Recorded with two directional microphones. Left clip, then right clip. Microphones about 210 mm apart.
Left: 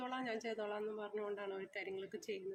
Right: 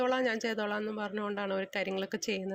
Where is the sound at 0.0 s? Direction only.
40° right (ahead or behind).